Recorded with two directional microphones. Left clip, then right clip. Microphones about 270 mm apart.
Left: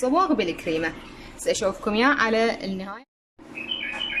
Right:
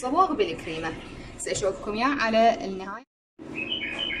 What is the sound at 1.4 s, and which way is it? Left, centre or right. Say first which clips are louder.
A woman's voice: left 4 dB; left.